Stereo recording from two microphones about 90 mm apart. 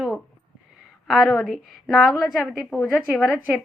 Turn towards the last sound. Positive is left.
turn(degrees=0)  # may be behind; listen again after turning